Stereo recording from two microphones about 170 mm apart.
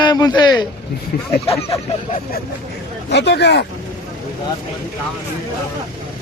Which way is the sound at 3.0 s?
90° left.